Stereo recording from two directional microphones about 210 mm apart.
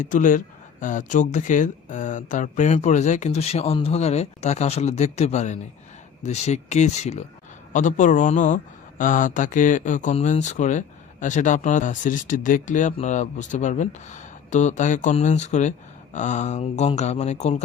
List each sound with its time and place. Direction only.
0.0 s speech: 40° left (ahead or behind)